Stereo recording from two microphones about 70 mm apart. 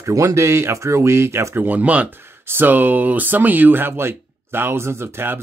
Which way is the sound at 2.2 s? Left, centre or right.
Right.